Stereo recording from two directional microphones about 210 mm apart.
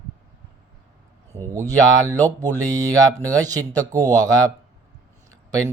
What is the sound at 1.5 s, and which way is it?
Speech, 15° right (ahead or behind).